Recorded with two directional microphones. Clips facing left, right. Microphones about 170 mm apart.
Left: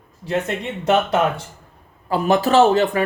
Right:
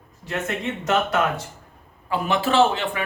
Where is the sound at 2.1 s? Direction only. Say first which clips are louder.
Left 5 dB; 40° left (ahead or behind).